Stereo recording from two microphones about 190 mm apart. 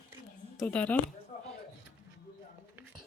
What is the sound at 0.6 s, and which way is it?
Speech, 10° left (ahead or behind).